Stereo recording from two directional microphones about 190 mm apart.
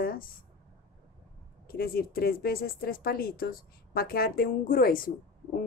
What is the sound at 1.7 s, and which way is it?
Speech, 50° left (ahead or behind).